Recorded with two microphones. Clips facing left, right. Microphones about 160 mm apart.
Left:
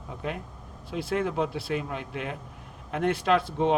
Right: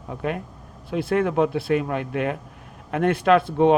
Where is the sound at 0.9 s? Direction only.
55° right (ahead or behind).